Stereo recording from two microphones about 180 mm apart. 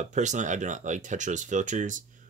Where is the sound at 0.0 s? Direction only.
40° right (ahead or behind).